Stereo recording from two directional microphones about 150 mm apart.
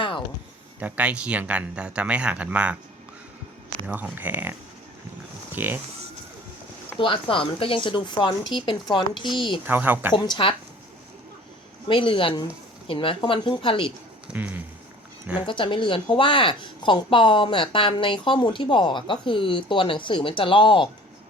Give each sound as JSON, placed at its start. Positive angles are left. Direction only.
{"t": 0.8, "sound": "speech", "side_deg": -10}
{"t": 3.8, "sound": "speech", "side_deg": -10}
{"t": 5.5, "sound": "speech", "side_deg": -15}
{"t": 7.0, "sound": "speech", "side_deg": 35}
{"t": 9.6, "sound": "speech", "side_deg": -10}
{"t": 10.2, "sound": "speech", "side_deg": 35}
{"t": 11.9, "sound": "speech", "side_deg": 35}
{"t": 14.3, "sound": "speech", "side_deg": -10}
{"t": 15.4, "sound": "speech", "side_deg": 35}